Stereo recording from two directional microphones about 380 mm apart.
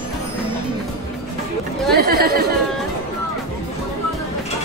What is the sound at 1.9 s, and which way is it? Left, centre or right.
Chatter, right.